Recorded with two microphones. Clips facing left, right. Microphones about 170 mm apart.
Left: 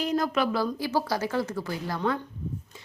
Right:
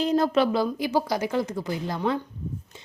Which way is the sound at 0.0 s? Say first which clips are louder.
Right 4 dB; 30° right (ahead or behind).